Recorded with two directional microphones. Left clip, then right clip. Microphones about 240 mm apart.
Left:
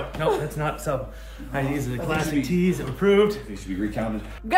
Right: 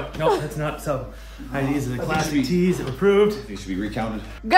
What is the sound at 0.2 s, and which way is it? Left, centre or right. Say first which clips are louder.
Speech: right 3 dB; centre.